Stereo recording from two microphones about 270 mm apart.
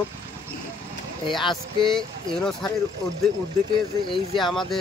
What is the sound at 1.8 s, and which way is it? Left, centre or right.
Speech, centre.